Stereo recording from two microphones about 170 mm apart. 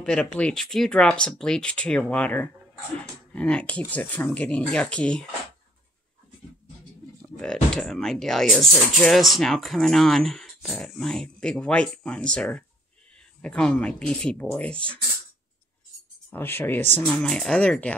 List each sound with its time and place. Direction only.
0.0 s speech: 5° left (ahead or behind)
7.7 s speech: 5° left (ahead or behind)
16.3 s speech: 10° left (ahead or behind)